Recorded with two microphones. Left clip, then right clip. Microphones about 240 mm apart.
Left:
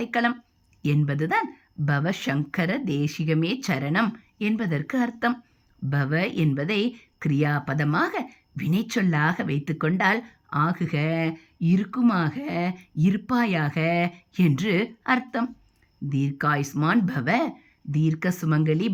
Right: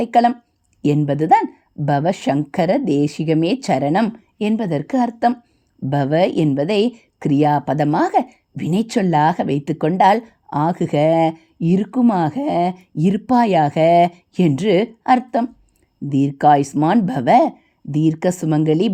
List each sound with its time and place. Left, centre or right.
0.0 s speech: centre